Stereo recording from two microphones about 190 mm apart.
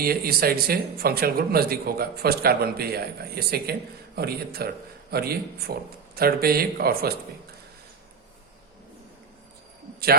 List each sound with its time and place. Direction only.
0.0 s speech: 50° right (ahead or behind)